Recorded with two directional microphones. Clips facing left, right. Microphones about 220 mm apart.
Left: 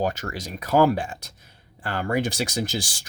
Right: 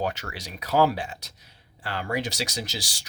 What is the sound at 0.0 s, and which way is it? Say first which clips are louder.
Speech: left 4 dB; 45° left (ahead or behind).